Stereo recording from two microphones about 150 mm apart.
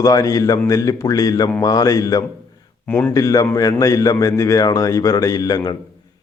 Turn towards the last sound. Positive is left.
turn(degrees=25)  # may be behind; listen again after turning